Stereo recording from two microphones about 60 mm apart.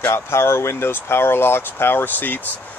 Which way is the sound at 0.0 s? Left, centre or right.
Left.